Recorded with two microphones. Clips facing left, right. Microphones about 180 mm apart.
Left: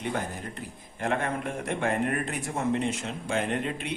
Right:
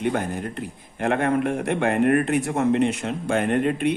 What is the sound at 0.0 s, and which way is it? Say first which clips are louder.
A man's voice: right 7 dB; 60° right (ahead or behind).